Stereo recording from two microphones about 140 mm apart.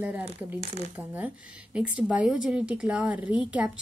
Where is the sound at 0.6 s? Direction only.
50° right (ahead or behind).